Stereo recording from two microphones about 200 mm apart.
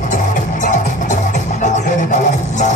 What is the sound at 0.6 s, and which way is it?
Music, 40° left (ahead or behind).